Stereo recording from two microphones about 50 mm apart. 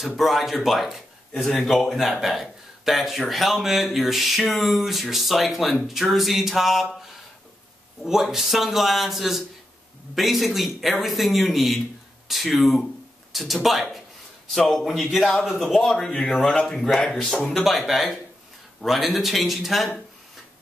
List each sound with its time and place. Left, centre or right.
0.0 s a man's voice: centre
15.9 s a man's voice: centre
16.7 s a man's voice: centre